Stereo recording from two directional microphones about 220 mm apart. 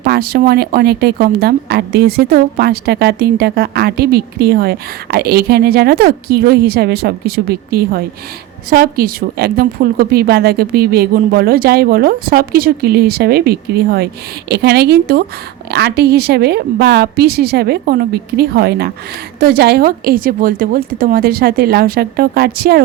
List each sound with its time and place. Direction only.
0.0 s speech: 45° right (ahead or behind)